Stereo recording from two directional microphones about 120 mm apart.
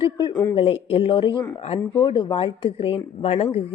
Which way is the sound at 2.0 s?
35° left (ahead or behind).